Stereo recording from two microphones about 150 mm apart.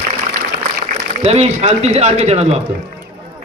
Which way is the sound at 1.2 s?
45° right (ahead or behind).